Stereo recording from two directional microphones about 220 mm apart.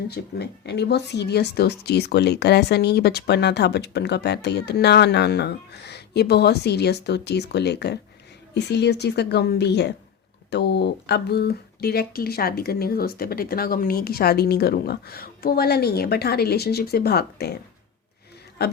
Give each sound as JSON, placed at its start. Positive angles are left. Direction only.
{"t": 0.1, "sound": "speech", "side_deg": 50}